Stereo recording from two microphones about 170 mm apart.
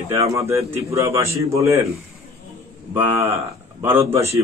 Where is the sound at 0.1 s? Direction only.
15° right (ahead or behind).